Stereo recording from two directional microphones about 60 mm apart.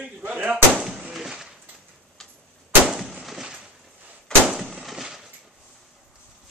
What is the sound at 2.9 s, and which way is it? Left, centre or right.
Gunshot, centre.